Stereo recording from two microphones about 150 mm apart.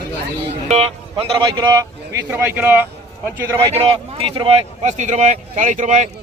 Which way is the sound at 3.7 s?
40° right (ahead or behind).